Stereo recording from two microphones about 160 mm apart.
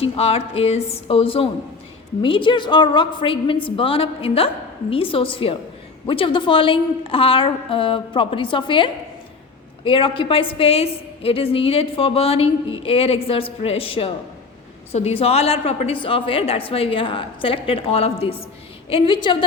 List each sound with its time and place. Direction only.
0.0 s a woman's voice: 40° left (ahead or behind)